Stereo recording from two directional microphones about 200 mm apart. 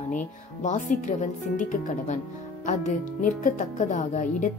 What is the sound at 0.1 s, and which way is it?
Speech, 40° left (ahead or behind).